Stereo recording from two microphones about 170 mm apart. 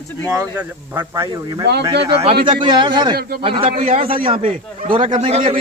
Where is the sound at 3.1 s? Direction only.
65° right (ahead or behind).